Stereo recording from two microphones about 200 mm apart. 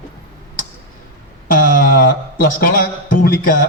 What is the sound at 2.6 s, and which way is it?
Speech, 45° left (ahead or behind).